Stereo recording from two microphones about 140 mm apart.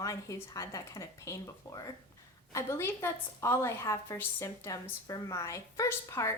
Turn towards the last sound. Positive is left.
turn(degrees=20)  # may be behind; listen again after turning